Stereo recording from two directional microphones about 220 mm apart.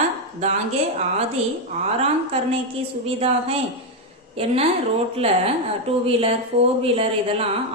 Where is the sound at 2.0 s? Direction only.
25° right (ahead or behind).